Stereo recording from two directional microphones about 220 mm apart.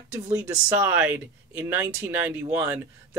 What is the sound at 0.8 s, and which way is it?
Speech, 10° right (ahead or behind).